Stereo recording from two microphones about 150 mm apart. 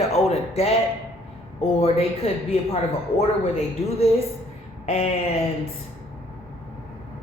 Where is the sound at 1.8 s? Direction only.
40° left (ahead or behind).